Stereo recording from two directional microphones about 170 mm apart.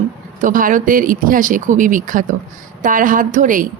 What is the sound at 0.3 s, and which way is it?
Speech, 50° right (ahead or behind).